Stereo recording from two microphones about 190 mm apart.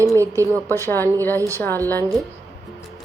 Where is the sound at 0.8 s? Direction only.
10° left (ahead or behind).